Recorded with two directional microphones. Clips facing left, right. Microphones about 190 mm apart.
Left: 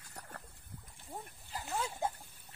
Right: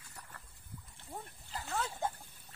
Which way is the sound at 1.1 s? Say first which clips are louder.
Even; 15° left (ahead or behind).